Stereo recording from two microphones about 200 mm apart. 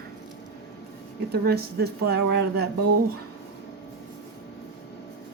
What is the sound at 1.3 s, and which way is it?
Speech, 50° right (ahead or behind).